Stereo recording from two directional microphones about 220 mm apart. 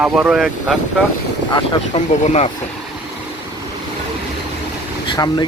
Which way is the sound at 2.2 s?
30° left (ahead or behind).